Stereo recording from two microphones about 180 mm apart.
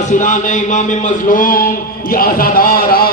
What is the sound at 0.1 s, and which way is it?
A man's voice, 45° left (ahead or behind).